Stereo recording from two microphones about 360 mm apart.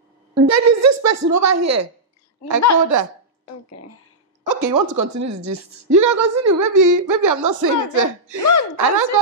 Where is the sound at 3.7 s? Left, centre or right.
Left.